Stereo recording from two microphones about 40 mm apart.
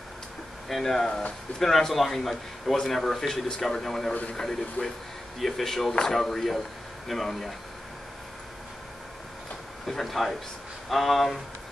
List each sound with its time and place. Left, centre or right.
0.7 s a man's voice: centre
4.1 s speech: left
4.8 s speech: left
5.4 s a man's voice: centre
9.8 s speech: centre